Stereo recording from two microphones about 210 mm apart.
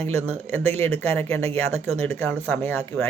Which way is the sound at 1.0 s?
10° left (ahead or behind).